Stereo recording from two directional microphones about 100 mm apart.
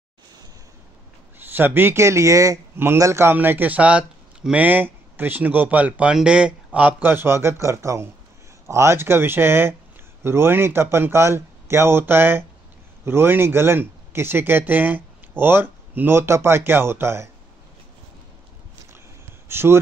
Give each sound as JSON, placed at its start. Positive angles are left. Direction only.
{"t": 1.4, "sound": "speech", "side_deg": -20}
{"t": 19.5, "sound": "speech", "side_deg": -25}